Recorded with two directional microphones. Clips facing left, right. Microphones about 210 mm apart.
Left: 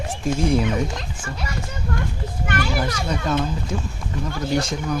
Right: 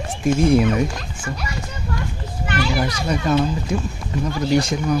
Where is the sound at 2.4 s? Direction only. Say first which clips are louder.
Right 2 dB; 50° left (ahead or behind).